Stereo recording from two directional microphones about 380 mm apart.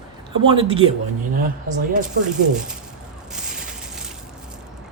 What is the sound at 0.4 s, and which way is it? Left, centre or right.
Speech, centre.